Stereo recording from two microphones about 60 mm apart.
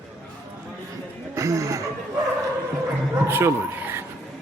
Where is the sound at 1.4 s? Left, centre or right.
Right.